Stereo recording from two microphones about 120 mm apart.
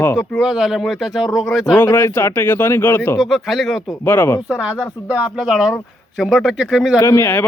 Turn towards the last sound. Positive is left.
turn(degrees=25)  # may be behind; listen again after turning